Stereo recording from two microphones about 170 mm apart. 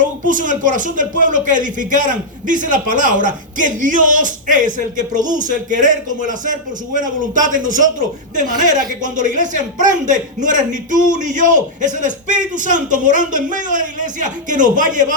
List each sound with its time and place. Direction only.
0.0 s speech: 50° right (ahead or behind)
9.1 s speech: 50° right (ahead or behind)